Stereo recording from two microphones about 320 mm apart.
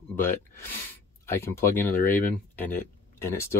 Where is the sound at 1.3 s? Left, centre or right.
Centre.